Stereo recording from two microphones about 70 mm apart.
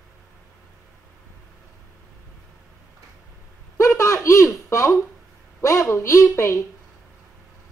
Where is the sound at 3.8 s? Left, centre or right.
Left.